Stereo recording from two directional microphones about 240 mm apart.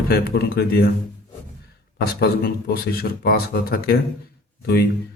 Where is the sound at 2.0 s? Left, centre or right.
Left.